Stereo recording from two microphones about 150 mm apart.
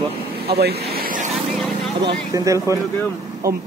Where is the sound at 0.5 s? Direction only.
90° right; by 1.3 s 65° right (ahead or behind).